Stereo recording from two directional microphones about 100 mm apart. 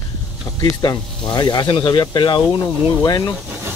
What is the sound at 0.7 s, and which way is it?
Speech, 45° left (ahead or behind).